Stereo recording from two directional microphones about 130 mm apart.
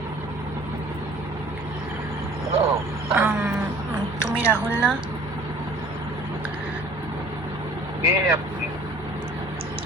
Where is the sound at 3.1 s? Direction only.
15° right (ahead or behind).